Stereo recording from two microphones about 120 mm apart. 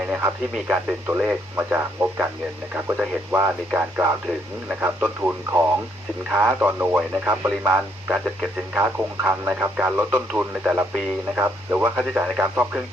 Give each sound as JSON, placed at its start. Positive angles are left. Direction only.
{"t": 0.0, "sound": "speech", "side_deg": -10}